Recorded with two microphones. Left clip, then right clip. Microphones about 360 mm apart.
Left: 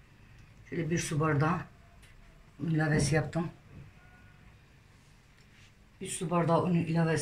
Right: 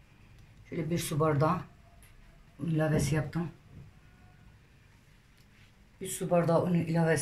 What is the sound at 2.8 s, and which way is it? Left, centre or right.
Speech, centre.